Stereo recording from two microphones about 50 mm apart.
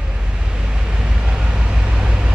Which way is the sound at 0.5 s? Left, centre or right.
Centre.